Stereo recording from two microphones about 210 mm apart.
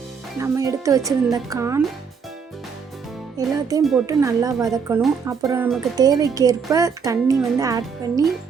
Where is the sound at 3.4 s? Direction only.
15° right (ahead or behind).